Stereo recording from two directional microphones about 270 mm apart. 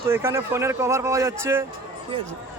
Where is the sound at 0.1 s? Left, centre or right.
Centre.